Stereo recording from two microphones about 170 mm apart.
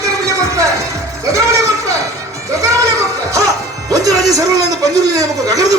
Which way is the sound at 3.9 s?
20° right (ahead or behind).